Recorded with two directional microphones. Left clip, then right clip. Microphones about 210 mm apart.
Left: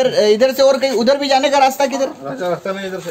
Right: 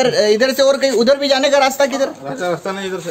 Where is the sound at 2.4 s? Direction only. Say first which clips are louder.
Even; 35° right (ahead or behind).